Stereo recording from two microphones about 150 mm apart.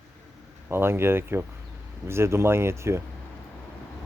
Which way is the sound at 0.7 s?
15° right (ahead or behind).